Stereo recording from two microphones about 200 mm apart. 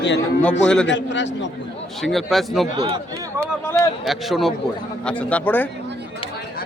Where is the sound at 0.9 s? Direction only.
65° left (ahead or behind).